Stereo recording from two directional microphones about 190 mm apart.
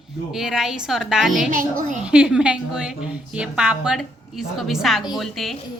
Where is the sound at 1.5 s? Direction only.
45° right (ahead or behind).